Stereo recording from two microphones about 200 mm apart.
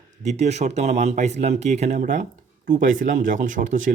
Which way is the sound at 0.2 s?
35° right (ahead or behind).